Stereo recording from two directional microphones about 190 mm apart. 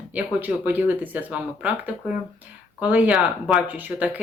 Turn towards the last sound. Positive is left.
turn(degrees=-10)  # may be behind; listen again after turning